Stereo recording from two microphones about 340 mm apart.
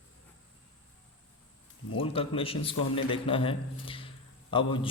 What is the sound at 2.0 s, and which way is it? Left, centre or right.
Speech, centre.